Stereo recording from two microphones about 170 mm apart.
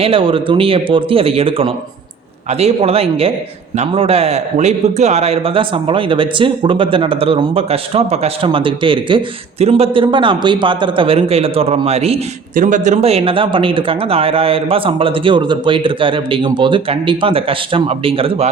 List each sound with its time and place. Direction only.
0.0 s a man's voice: 30° right (ahead or behind)